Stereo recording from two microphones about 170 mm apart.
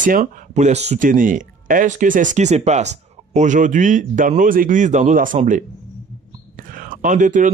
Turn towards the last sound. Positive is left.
turn(degrees=-50)  # may be behind; listen again after turning